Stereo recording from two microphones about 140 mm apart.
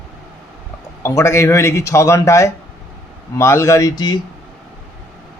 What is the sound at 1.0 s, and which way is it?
Speech, 20° left (ahead or behind).